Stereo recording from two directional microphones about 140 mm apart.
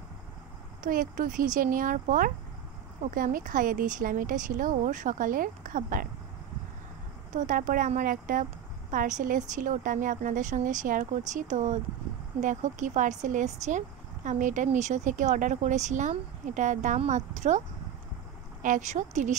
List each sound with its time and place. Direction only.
0.8 s speech: 75° right (ahead or behind)
7.3 s speech: 70° right (ahead or behind)